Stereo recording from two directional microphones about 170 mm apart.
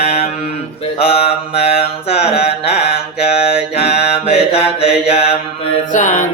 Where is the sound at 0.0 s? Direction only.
40° left (ahead or behind).